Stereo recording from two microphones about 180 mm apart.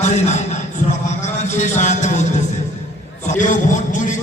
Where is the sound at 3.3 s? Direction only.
45° left (ahead or behind).